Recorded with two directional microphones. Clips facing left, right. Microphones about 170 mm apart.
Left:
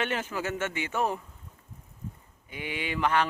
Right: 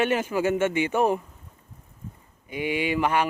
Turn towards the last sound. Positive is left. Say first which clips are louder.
# right 4 dB
turn(degrees=-10)  # may be behind; listen again after turning